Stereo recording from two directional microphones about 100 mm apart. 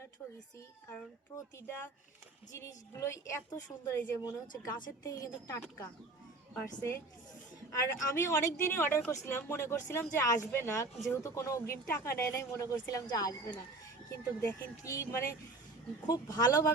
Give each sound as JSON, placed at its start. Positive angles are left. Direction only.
{"t": 1.5, "sound": "speech", "side_deg": 25}
{"t": 4.2, "sound": "speech", "side_deg": 35}
{"t": 7.8, "sound": "speech", "side_deg": 30}
{"t": 16.0, "sound": "speech", "side_deg": 40}